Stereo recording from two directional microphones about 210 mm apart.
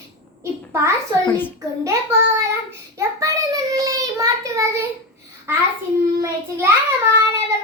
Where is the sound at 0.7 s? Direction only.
15° right (ahead or behind).